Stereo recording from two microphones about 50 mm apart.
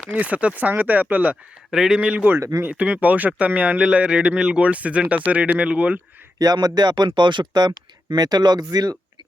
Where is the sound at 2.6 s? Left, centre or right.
Right.